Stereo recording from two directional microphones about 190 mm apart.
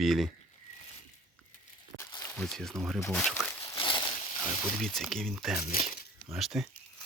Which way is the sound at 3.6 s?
20° left (ahead or behind).